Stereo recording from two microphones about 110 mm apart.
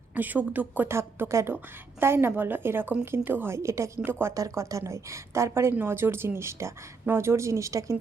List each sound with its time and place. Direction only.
0.1 s a woman's voice: 15° right (ahead or behind)